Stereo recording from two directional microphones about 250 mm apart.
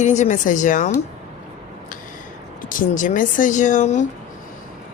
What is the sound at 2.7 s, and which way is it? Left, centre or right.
Speech, left.